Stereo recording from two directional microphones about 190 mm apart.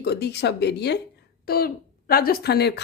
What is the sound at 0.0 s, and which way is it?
Speech, 60° left (ahead or behind).